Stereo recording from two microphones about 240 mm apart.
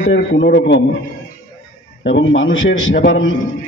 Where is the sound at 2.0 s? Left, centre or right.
Left.